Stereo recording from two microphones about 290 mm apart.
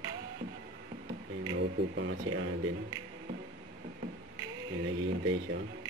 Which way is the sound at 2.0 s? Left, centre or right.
Right.